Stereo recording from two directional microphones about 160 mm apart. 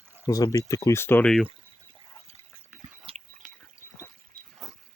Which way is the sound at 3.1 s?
35° right (ahead or behind).